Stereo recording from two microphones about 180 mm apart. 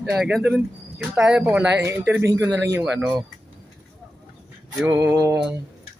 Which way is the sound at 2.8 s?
Centre (ahead or behind).